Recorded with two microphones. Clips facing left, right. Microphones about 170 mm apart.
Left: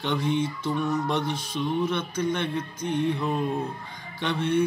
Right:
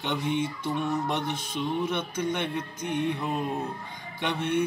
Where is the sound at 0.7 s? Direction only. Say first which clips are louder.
Left 2 dB; 20° right (ahead or behind).